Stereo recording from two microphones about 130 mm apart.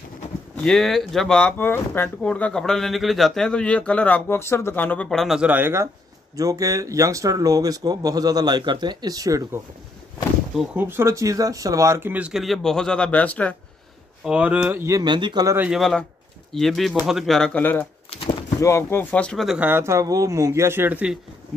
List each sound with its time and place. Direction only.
0.7 s speech: centre (ahead or behind)
1.6 s speech: 15° left (ahead or behind); by 9.6 s 25° right (ahead or behind)
10.5 s speech: 5° right (ahead or behind)
10.8 s speech: 20° right (ahead or behind); by 13.6 s 10° left (ahead or behind)
14.2 s speech: 10° right (ahead or behind)
15.0 s speech: 35° right (ahead or behind)
15.4 s speech: 15° right (ahead or behind)
15.7 s speech: 5° left (ahead or behind)
19.6 s speech: 20° right (ahead or behind)